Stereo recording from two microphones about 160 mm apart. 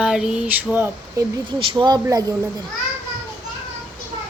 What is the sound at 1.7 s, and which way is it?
Speech, 25° right (ahead or behind).